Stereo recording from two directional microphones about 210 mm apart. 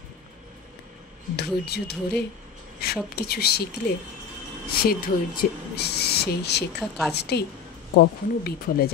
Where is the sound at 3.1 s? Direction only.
50° left (ahead or behind).